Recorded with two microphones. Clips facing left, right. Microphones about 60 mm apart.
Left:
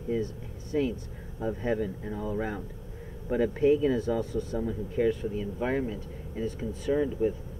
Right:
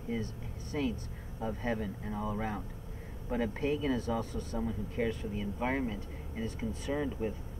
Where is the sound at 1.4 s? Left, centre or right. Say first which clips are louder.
Left 5 dB; centre.